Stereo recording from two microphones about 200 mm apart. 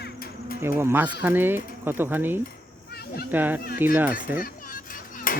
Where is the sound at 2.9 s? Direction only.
50° left (ahead or behind).